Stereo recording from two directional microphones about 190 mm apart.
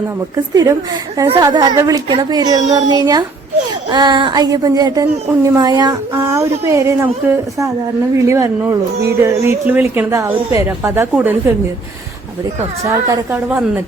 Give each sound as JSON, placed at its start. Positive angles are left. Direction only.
{"t": 0.5, "sound": "speech", "side_deg": -20}
{"t": 13.3, "sound": "speech", "side_deg": -5}